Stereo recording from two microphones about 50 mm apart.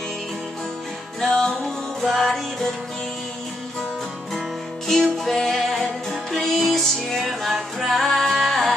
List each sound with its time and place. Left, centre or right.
1.2 s music: centre
2.0 s music: centre
4.8 s music: centre